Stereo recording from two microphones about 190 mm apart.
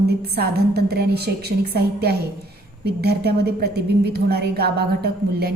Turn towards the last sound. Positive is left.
turn(degrees=-55)  # may be behind; listen again after turning